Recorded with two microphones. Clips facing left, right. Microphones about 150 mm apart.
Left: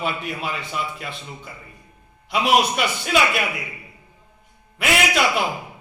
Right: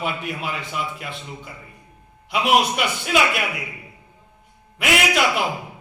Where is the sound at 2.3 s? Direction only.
15° right (ahead or behind).